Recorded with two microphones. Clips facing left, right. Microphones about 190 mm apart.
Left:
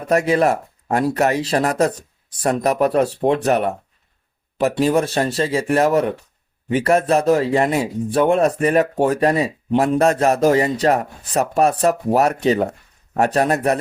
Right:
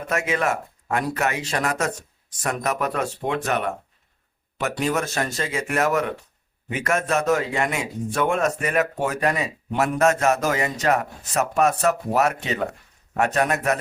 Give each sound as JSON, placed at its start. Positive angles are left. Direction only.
{"t": 0.1, "sound": "speech", "side_deg": 35}